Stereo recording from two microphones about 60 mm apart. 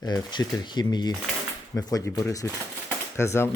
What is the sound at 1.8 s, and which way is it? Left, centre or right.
Speech, left.